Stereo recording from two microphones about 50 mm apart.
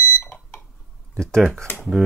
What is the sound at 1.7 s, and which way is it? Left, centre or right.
Speech, left.